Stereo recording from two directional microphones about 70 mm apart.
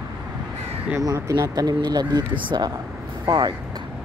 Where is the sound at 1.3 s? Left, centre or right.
Right.